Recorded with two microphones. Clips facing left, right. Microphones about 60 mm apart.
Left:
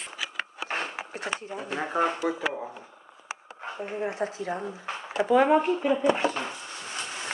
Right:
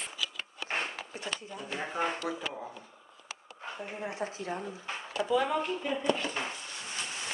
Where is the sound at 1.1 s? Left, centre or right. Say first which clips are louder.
Left 6 dB; left.